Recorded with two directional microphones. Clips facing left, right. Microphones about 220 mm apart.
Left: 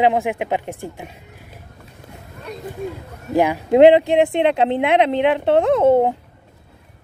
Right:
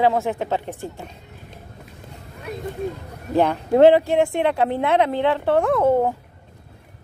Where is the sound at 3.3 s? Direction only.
10° left (ahead or behind).